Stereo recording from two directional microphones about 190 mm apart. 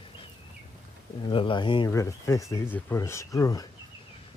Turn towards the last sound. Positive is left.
turn(degrees=20)  # may be behind; listen again after turning